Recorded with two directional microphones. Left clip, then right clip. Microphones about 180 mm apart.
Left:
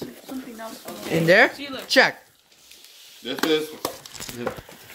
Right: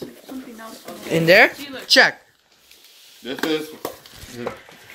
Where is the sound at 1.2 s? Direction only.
5° left (ahead or behind).